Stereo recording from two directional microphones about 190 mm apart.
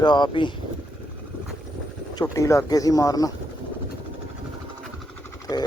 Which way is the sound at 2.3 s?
15° left (ahead or behind).